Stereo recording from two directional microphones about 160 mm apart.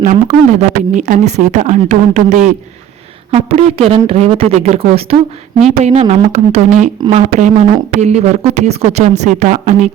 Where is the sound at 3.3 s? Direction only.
40° right (ahead or behind).